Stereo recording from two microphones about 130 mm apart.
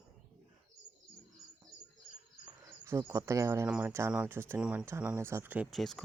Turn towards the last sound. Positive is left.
turn(degrees=0)  # may be behind; listen again after turning